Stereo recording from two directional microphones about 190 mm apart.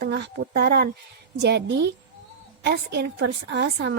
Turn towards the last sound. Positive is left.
turn(degrees=-65)  # may be behind; listen again after turning